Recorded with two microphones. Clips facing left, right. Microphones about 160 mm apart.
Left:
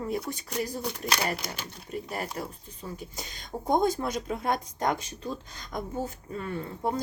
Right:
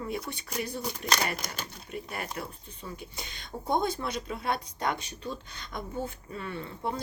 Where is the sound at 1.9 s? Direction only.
40° left (ahead or behind).